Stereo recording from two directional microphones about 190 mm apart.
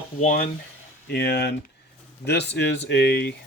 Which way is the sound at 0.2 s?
45° left (ahead or behind).